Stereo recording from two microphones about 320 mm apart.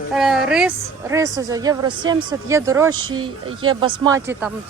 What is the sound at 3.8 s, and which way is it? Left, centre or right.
Speech, centre.